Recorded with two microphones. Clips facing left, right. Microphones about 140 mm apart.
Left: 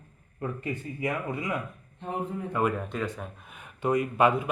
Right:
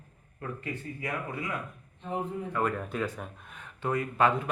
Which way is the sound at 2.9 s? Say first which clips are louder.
Even; centre (ahead or behind).